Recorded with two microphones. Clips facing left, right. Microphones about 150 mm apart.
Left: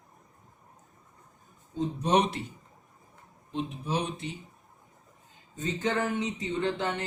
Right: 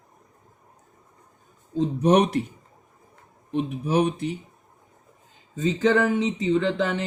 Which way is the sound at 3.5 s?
65° right (ahead or behind).